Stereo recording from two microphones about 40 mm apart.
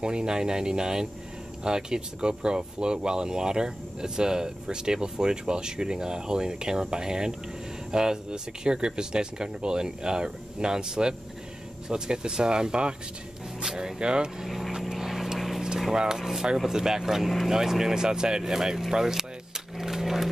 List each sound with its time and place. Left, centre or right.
0.0 s speech: right
14.4 s speech: centre
14.8 s vehicle: centre
15.9 s speech: centre
19.8 s a sound: centre